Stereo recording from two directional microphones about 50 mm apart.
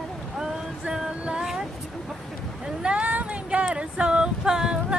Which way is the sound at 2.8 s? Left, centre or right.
Right.